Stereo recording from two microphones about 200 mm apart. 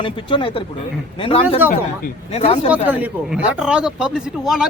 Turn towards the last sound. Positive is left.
turn(degrees=0)  # may be behind; listen again after turning